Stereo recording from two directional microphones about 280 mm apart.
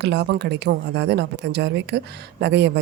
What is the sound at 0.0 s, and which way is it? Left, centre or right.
Speech, right.